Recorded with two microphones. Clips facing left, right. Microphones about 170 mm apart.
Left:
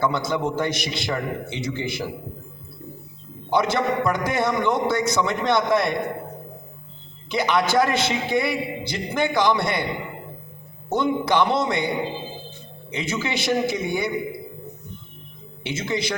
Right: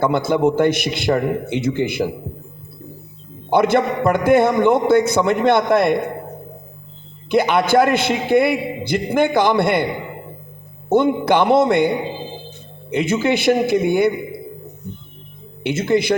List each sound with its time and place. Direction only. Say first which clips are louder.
0.0 s a man's voice: right 7 dB; 55° right (ahead or behind)
3.5 s a man's voice: right 5 dB; 55° right (ahead or behind)
7.3 s a man's voice: right 6 dB; 55° right (ahead or behind)
10.9 s a man's voice: right 6 dB; 55° right (ahead or behind)
12.9 s a man's voice: right 9 dB; 55° right (ahead or behind)
15.6 s a man's voice: right 9 dB; 55° right (ahead or behind)